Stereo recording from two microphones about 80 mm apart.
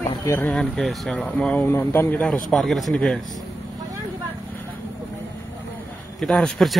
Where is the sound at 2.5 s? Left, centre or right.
Centre.